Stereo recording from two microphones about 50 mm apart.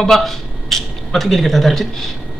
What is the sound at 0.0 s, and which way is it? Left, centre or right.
Speech, centre.